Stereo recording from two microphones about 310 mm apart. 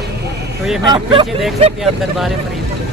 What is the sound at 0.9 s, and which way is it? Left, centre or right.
Speech, centre.